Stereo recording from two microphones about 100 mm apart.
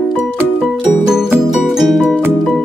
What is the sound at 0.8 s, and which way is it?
Music, 5° right (ahead or behind).